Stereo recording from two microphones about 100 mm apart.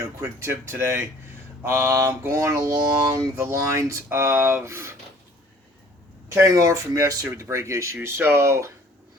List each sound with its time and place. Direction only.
0.0 s speech: 30° right (ahead or behind)
6.2 s speech: 30° right (ahead or behind)